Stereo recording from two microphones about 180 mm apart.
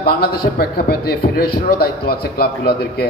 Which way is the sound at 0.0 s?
60° left (ahead or behind).